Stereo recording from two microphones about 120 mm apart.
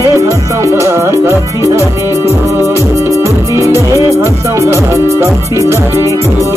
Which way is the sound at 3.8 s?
25° left (ahead or behind).